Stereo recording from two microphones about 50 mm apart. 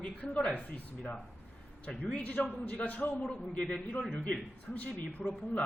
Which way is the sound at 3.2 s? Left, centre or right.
Left.